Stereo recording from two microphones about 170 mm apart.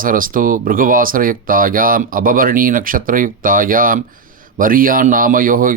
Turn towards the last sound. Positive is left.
turn(degrees=-55)  # may be behind; listen again after turning